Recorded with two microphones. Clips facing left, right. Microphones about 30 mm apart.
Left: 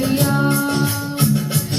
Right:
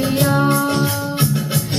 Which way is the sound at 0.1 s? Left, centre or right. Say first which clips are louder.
Right 3 dB; centre.